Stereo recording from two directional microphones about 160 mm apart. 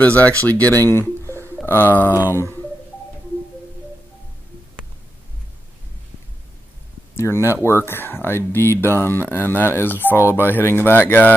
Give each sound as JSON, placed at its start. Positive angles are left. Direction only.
{"t": 0.0, "sound": "speech", "side_deg": 10}
{"t": 0.8, "sound": "a sound", "side_deg": 15}
{"t": 2.0, "sound": "speech", "side_deg": -10}
{"t": 7.2, "sound": "speech", "side_deg": 15}